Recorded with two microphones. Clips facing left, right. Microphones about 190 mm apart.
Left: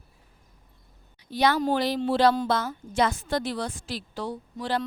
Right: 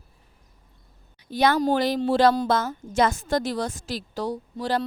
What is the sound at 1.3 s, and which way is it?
A woman's voice, 50° right (ahead or behind).